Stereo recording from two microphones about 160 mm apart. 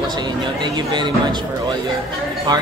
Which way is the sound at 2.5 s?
25° right (ahead or behind).